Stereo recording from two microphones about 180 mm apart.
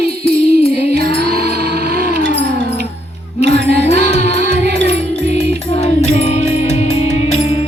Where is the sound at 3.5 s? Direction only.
80° right.